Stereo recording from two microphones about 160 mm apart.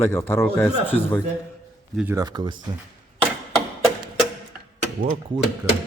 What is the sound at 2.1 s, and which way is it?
Speech, 25° right (ahead or behind).